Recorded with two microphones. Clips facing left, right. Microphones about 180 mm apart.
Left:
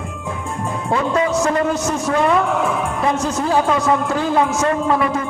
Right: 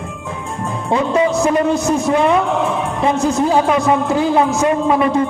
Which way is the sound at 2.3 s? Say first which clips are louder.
Right 2 dB; 25° right (ahead or behind).